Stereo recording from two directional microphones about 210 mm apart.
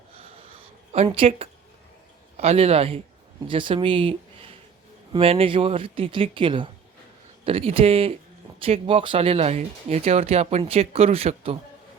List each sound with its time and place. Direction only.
1.0 s speech: 25° right (ahead or behind)